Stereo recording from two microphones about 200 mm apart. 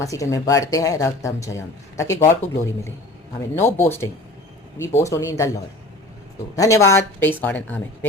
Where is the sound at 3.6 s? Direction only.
10° left (ahead or behind).